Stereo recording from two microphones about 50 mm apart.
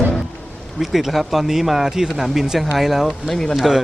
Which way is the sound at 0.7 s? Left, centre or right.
Centre.